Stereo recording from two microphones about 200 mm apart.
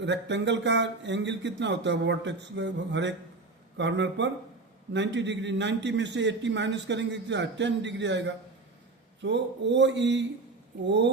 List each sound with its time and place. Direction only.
0.0 s a man's voice: 60° right (ahead or behind)